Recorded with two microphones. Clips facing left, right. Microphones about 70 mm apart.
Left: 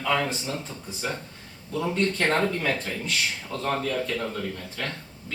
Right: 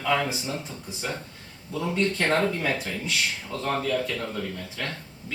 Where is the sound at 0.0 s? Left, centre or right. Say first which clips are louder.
Even; centre.